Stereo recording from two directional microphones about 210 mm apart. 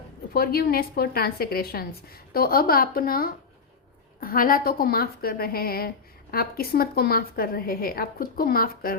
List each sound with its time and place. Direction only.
0.3 s a woman's voice: 45° left (ahead or behind)